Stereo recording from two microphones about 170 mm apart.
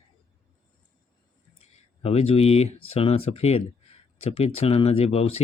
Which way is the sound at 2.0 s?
35° left (ahead or behind).